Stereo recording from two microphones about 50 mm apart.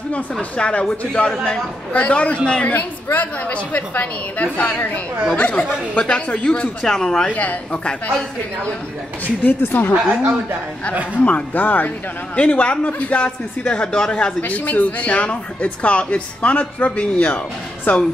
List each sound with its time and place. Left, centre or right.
0.1 s speech: left
1.9 s speech: left
2.7 s a woman's voice: left; by 7.2 s centre
7.2 s speech: left
9.4 s a woman's voice: left
10.0 s speech: right
11.1 s a woman's voice: left
14.4 s a woman's voice: left